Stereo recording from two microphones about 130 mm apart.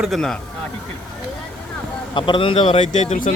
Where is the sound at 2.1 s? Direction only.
40° left (ahead or behind); by 3.3 s 70° left (ahead or behind).